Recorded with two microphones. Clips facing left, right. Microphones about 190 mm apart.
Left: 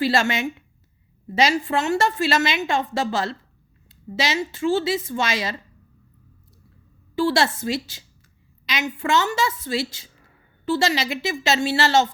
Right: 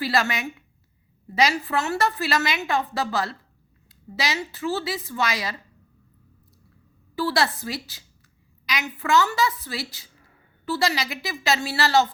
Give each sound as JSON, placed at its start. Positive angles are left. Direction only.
{"t": 0.0, "sound": "a woman's voice", "side_deg": 25}
{"t": 7.2, "sound": "a woman's voice", "side_deg": 25}